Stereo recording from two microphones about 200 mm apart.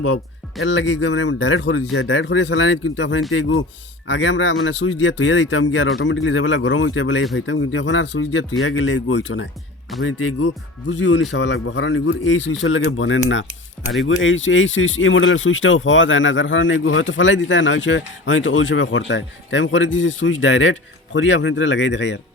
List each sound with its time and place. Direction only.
0.6 s a man's voice: 65° left (ahead or behind)
10.0 s speech: 80° left; by 22.2 s 65° left (ahead or behind)